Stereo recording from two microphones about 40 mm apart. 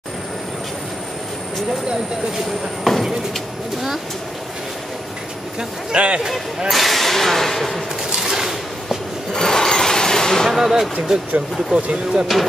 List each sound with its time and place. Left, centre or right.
2.8 s speech: centre
5.9 s speech: right
6.7 s speech: centre
8.2 s a sound: centre
9.3 s rub: centre
10.5 s speech: centre
11.7 s speech: right